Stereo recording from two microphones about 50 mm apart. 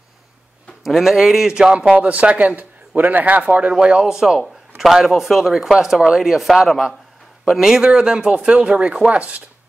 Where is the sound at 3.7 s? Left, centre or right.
Centre.